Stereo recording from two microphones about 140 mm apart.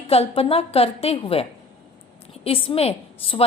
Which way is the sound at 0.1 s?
45° left (ahead or behind).